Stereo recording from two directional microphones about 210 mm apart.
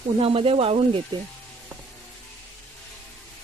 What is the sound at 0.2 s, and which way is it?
Speech, 25° right (ahead or behind).